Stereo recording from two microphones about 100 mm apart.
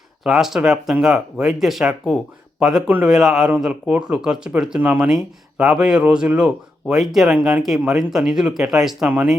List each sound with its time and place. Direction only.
0.3 s speech: 5° right (ahead or behind)